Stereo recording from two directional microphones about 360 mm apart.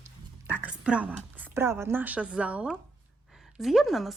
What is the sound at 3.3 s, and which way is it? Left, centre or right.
Speech, centre.